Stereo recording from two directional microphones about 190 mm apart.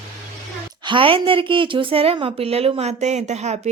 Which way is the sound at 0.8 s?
25° right (ahead or behind).